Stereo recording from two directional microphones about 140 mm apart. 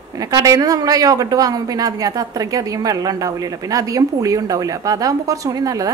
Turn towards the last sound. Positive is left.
turn(degrees=-25)  # may be behind; listen again after turning